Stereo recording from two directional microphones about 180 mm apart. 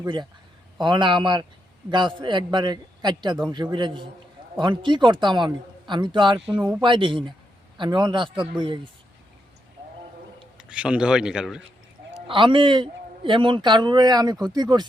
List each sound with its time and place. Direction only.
0.0 s a man's voice: 25° right (ahead or behind)
10.6 s a man's voice: 5° right (ahead or behind)
12.3 s a man's voice: 30° right (ahead or behind)